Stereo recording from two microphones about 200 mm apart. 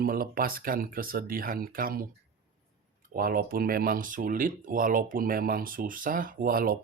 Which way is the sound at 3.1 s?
45° right (ahead or behind).